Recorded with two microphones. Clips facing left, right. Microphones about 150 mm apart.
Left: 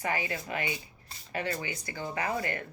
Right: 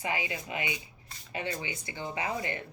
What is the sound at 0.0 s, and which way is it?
Speech, 20° right (ahead or behind).